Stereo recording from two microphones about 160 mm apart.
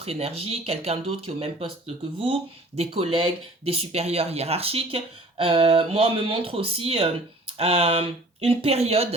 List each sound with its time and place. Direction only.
0.0 s speech: 40° right (ahead or behind)